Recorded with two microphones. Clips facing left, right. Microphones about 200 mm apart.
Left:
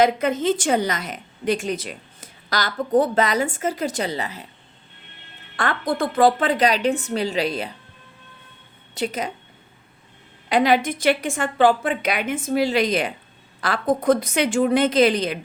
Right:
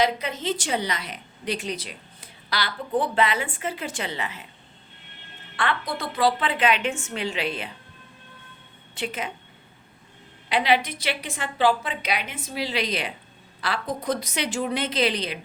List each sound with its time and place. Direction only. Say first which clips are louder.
0.0 s a woman's voice: left 6 dB; 50° left (ahead or behind)
5.5 s a woman's voice: left 5 dB; 45° left (ahead or behind)
9.0 s a woman's voice: left 5 dB; 40° left (ahead or behind)
10.5 s a woman's voice: left 4 dB; 45° left (ahead or behind)